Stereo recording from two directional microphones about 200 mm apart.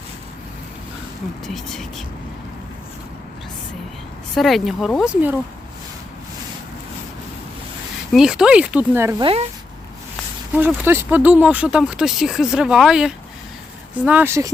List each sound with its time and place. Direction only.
1.5 s speech: centre (ahead or behind)
4.4 s speech: centre (ahead or behind)
8.1 s speech: 5° right (ahead or behind)
9.2 s speech: 30° right (ahead or behind)
10.8 s speech: 10° right (ahead or behind)